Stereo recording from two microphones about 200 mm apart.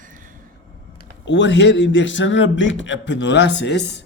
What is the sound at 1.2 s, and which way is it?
A man's voice, 65° left (ahead or behind).